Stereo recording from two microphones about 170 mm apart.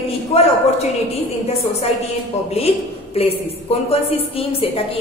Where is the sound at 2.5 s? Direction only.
35° left (ahead or behind).